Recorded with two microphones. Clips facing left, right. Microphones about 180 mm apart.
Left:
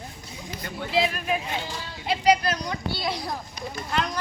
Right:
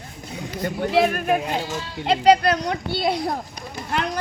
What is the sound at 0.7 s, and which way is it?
Speech, 45° right (ahead or behind).